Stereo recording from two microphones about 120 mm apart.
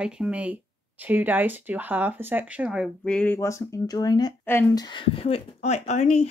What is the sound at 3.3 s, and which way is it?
Speech, 25° left (ahead or behind).